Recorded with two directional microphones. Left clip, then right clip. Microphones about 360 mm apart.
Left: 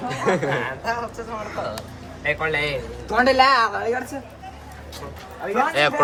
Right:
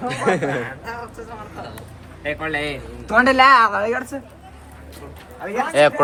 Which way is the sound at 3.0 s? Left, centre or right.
Right.